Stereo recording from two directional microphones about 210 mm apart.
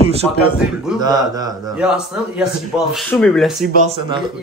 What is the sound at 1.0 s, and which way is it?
Speech, 20° right (ahead or behind).